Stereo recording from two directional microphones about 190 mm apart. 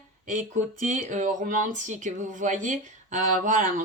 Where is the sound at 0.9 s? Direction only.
40° right (ahead or behind).